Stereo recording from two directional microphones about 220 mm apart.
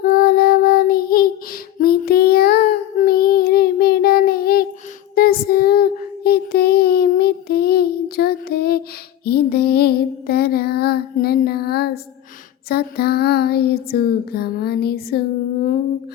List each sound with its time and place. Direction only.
0.0 s child singing: 40° left (ahead or behind)
9.2 s music: 45° left (ahead or behind)
12.6 s female singing: 45° left (ahead or behind)